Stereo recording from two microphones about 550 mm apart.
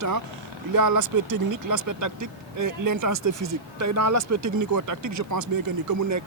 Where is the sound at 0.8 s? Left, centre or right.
Right.